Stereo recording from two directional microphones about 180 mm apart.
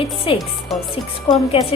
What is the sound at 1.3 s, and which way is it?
Speech, 30° left (ahead or behind).